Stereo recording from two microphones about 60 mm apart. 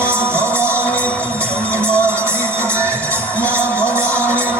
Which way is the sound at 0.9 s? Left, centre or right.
Left.